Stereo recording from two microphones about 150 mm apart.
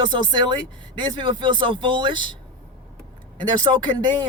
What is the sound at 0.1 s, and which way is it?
Speech, 30° right (ahead or behind).